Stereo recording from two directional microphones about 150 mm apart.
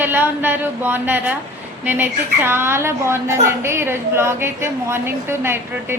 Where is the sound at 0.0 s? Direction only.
15° right (ahead or behind).